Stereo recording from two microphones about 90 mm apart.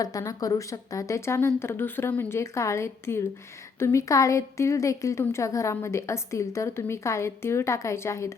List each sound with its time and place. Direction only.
0.0 s speech: 40° left (ahead or behind)